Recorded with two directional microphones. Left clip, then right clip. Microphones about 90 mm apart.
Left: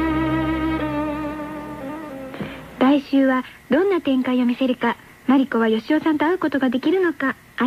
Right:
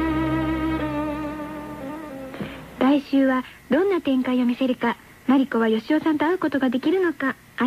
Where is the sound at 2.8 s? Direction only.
25° left (ahead or behind).